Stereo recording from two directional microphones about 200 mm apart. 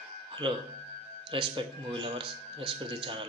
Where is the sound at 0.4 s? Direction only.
25° right (ahead or behind).